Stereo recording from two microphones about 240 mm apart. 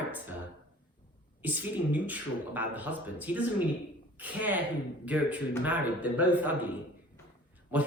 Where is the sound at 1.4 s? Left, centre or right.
Centre.